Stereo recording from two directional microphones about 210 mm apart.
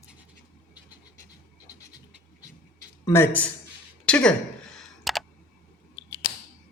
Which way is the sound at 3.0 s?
10° left (ahead or behind).